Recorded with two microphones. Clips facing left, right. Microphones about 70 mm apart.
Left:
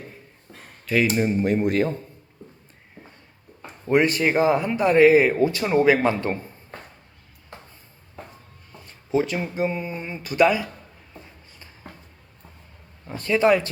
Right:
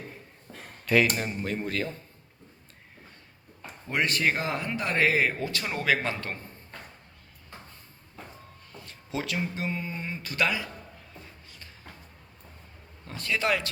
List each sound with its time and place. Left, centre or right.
0.9 s speech: centre
1.3 s speech: left
3.9 s speech: centre
4.3 s a man's voice: centre
8.8 s speech: centre
11.1 s a sound: centre
13.1 s speech: left